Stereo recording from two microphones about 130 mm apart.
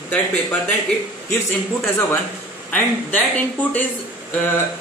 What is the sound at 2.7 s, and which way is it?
Speech, 10° left (ahead or behind).